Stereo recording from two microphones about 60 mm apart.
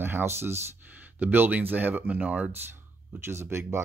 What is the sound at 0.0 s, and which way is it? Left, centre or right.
Speech, right.